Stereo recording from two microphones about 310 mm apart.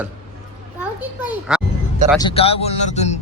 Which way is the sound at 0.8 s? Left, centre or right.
Centre.